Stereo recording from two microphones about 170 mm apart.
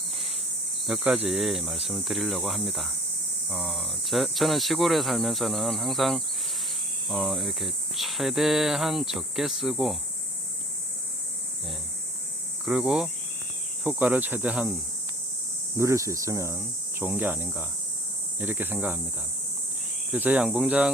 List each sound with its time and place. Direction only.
0.9 s cricket: 5° right (ahead or behind)
12.6 s cricket: 5° right (ahead or behind)
13.8 s speech: 10° right (ahead or behind)
15.8 s speech: 15° right (ahead or behind)
20.1 s speech: 10° right (ahead or behind)